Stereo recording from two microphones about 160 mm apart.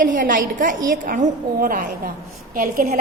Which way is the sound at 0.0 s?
55° right (ahead or behind).